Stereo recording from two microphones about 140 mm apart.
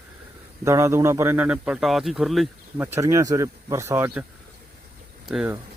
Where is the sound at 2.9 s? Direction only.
25° right (ahead or behind).